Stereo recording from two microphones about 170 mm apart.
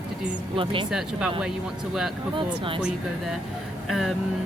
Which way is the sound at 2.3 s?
30° right (ahead or behind).